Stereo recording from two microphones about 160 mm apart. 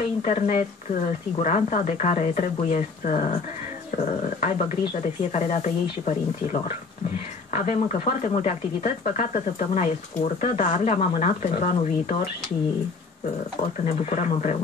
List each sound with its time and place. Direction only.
0.2 s speech: 50° left (ahead or behind)
13.8 s speech: 45° left (ahead or behind)